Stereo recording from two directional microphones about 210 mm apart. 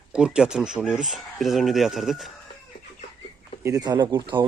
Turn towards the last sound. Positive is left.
turn(degrees=-20)  # may be behind; listen again after turning